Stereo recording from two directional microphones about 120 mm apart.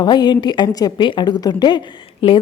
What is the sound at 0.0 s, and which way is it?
A woman's voice, 35° left (ahead or behind).